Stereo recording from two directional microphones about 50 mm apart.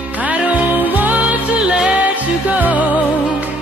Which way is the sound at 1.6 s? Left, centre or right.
Centre.